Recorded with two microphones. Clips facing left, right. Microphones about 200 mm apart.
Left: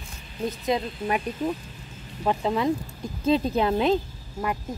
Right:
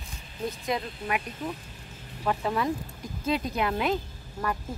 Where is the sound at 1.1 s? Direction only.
35° left (ahead or behind).